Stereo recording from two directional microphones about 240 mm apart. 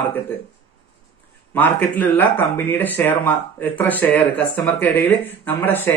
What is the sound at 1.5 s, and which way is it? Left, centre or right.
Speech, centre.